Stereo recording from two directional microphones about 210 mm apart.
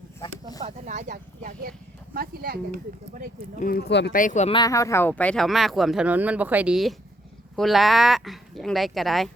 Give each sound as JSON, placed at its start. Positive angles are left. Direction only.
{"t": 0.6, "sound": "speech", "side_deg": -35}
{"t": 3.6, "sound": "speech", "side_deg": 45}
{"t": 4.2, "sound": "speech", "side_deg": 35}
{"t": 4.5, "sound": "speech", "side_deg": 15}